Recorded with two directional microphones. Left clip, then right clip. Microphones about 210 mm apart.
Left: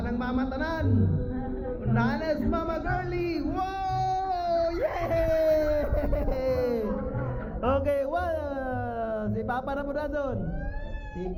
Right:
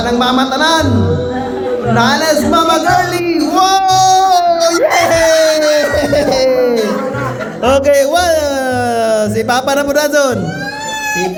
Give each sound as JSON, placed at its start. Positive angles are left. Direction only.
{"t": 0.2, "sound": "a man's voice", "side_deg": -20}
{"t": 2.0, "sound": "music", "side_deg": -15}
{"t": 5.2, "sound": "music", "side_deg": -5}
{"t": 7.6, "sound": "speech", "side_deg": -20}